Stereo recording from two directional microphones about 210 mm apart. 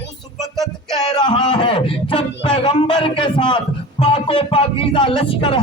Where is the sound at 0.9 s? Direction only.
20° left (ahead or behind).